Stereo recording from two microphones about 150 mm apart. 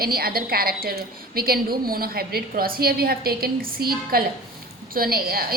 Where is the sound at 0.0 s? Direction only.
85° right.